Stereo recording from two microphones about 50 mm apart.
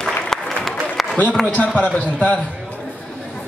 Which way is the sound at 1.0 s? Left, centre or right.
Centre.